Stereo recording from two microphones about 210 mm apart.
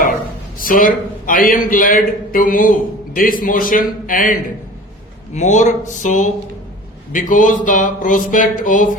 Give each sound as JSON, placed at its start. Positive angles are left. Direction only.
{"t": 0.6, "sound": "a man's voice", "side_deg": 40}